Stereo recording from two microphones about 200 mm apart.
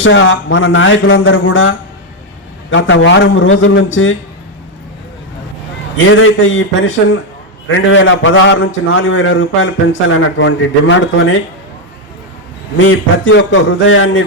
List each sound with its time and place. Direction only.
0.0 s a man's voice: 75° left (ahead or behind)
6.1 s a man's voice: 75° left (ahead or behind)
12.7 s a man's voice: 80° left